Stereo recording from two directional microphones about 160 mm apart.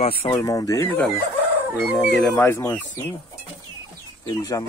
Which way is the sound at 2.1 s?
5° left (ahead or behind).